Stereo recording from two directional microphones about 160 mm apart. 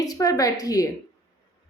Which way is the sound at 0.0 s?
20° left (ahead or behind).